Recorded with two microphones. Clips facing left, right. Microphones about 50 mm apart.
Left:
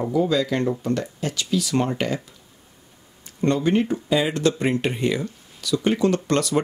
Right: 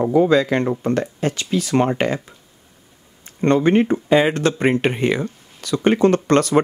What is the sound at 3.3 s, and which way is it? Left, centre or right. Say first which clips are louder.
Speech: right 5 dB; right.